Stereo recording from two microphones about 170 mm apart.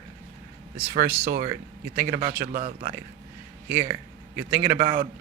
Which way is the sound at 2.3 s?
55° right (ahead or behind).